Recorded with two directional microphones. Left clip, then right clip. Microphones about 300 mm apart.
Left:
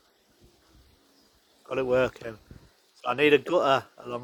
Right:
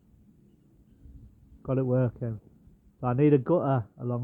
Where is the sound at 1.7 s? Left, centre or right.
Centre.